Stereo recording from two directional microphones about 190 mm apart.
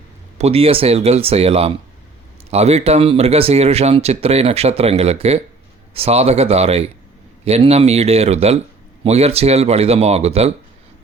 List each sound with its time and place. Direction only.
0.3 s speech: 30° right (ahead or behind)